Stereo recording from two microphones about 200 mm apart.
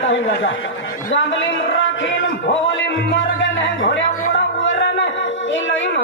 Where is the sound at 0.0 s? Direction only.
70° left (ahead or behind).